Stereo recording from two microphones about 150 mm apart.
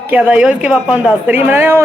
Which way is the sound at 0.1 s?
10° right (ahead or behind).